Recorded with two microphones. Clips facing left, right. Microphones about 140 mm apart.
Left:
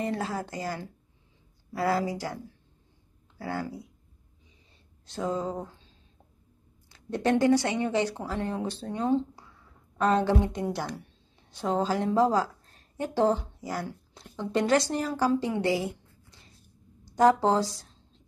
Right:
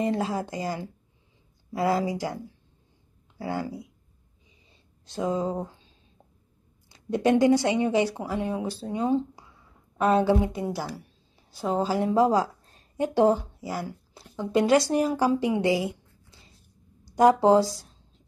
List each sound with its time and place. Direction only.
0.0 s speech: 15° right (ahead or behind)
3.3 s speech: 15° right (ahead or behind)
5.0 s speech: 15° right (ahead or behind)
6.9 s a woman's voice: 15° right (ahead or behind)
17.0 s speech: 10° right (ahead or behind)
17.7 s a sound: 5° right (ahead or behind)